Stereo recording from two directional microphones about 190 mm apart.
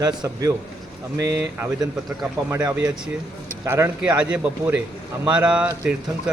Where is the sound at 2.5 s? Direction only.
15° right (ahead or behind).